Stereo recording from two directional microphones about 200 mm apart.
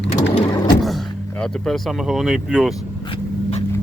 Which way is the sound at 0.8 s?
Centre (ahead or behind).